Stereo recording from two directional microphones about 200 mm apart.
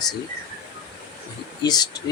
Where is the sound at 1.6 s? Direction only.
20° left (ahead or behind).